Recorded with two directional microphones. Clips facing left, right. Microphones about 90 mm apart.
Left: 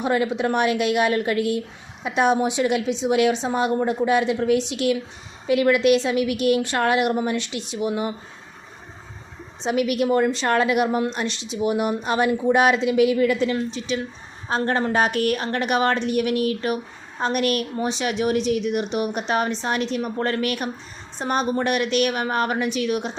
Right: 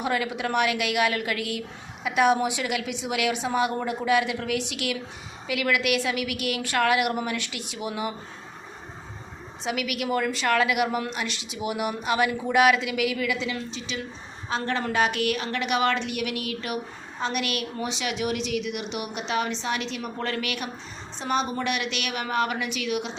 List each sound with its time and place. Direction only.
0.0 s a woman's voice: 30° left (ahead or behind)
9.6 s a woman's voice: 35° left (ahead or behind)